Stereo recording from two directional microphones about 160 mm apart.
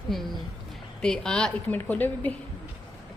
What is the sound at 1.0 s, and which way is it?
A woman's voice, 5° left (ahead or behind).